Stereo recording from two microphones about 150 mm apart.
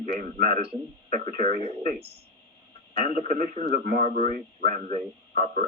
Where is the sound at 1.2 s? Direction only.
65° right (ahead or behind).